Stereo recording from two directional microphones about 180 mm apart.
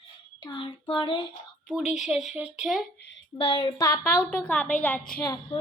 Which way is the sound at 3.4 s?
25° left (ahead or behind).